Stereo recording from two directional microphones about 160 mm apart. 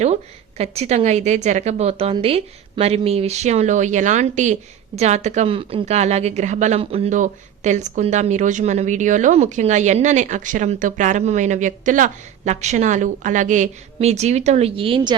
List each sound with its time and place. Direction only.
0.0 s speech: 45° right (ahead or behind)